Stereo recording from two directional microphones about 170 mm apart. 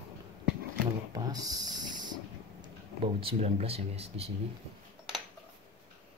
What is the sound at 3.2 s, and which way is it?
Speech, 35° right (ahead or behind).